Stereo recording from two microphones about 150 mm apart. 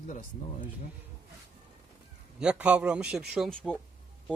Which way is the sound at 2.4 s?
5° right (ahead or behind).